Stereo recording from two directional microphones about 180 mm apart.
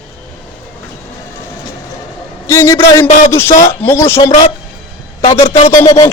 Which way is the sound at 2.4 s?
15° left (ahead or behind).